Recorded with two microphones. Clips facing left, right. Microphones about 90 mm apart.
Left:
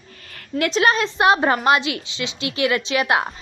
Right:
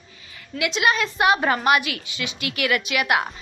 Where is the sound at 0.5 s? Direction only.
40° left (ahead or behind).